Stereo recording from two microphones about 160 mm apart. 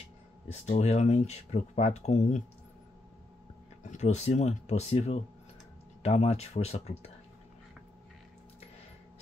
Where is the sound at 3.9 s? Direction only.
45° left (ahead or behind).